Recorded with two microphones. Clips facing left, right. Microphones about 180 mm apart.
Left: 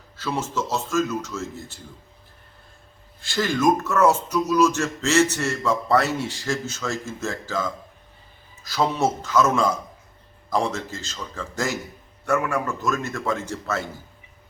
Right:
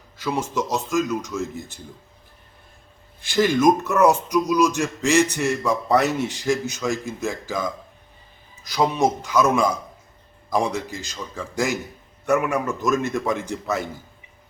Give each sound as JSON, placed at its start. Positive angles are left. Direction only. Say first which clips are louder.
{"t": 0.2, "sound": "speech", "louder": "right 2 dB", "side_deg": -15}
{"t": 3.2, "sound": "speech", "louder": "right 4 dB", "side_deg": -20}